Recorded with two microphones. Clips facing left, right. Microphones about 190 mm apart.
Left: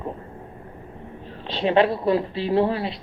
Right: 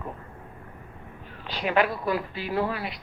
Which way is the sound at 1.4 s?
30° left (ahead or behind).